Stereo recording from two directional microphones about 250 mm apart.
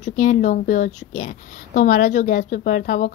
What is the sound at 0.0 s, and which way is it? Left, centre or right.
A woman's voice, left.